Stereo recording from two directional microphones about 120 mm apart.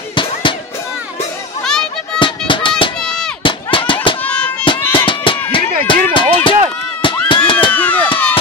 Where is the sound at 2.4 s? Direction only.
45° left (ahead or behind).